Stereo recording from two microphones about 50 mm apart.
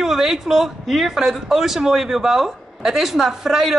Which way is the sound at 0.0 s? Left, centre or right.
Centre.